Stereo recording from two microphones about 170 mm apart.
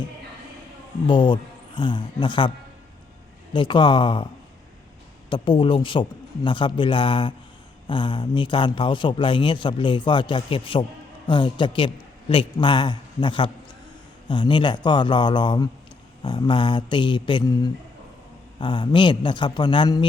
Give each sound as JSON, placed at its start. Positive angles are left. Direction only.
{"t": 1.0, "sound": "a man's voice", "side_deg": 30}
{"t": 3.5, "sound": "a man's voice", "side_deg": 30}
{"t": 5.3, "sound": "a man's voice", "side_deg": 30}